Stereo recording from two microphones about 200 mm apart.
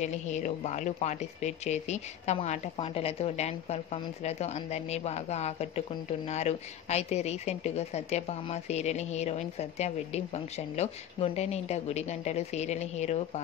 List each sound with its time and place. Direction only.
0.0 s speech: 35° left (ahead or behind)